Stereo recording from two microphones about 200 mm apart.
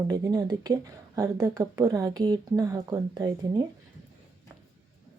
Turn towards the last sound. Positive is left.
turn(degrees=-20)  # may be behind; listen again after turning